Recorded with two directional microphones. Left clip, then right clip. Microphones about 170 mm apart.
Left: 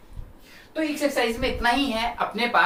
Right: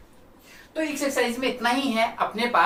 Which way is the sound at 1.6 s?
15° left (ahead or behind).